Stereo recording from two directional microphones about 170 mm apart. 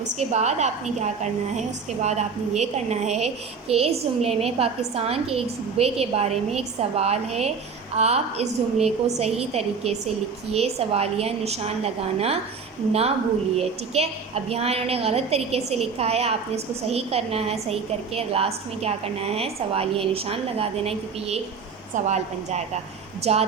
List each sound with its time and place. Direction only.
0.2 s a woman's voice: 40° right (ahead or behind)